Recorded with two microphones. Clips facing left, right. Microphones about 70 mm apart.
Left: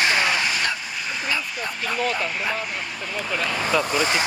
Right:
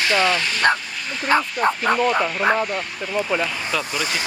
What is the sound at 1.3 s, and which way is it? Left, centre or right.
Speech, right.